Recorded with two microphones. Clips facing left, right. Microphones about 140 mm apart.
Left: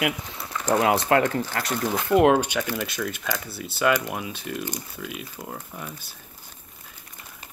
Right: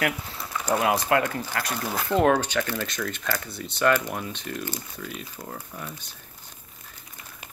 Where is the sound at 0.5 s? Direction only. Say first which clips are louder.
Left 2 dB; 10° right (ahead or behind).